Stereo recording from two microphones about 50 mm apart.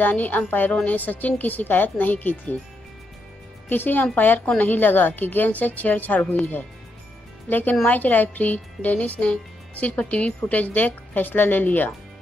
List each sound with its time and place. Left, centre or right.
0.0 s a woman's voice: left
3.6 s a woman's voice: left